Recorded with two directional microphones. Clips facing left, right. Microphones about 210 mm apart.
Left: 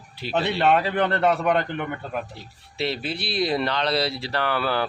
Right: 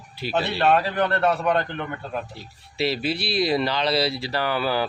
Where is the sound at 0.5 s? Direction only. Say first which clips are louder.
Even; 20° left (ahead or behind).